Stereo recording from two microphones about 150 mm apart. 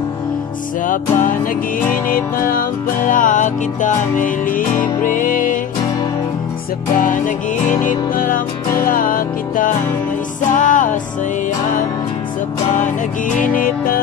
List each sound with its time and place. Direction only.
0.8 s music: 65° left (ahead or behind)
7.0 s music: 60° left (ahead or behind)
13.6 s music: 70° left (ahead or behind)